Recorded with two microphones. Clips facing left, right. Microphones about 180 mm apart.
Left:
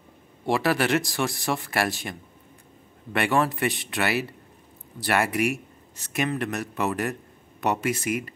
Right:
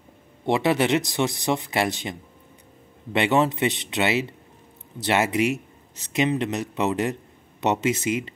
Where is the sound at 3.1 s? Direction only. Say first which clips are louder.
Right 3 dB; 20° right (ahead or behind).